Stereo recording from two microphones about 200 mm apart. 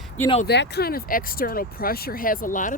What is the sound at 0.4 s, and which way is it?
Speech, 55° left (ahead or behind).